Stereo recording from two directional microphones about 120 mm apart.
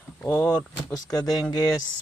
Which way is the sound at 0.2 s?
20° left (ahead or behind).